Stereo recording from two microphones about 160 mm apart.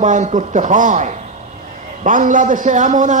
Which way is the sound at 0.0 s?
50° right (ahead or behind).